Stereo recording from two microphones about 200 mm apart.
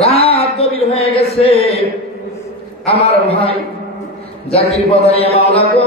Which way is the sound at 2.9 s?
30° left (ahead or behind).